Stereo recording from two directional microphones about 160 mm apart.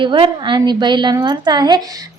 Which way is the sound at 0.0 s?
30° right (ahead or behind).